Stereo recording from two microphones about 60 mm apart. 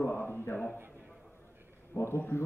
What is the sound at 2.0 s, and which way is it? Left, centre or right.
Speech, left.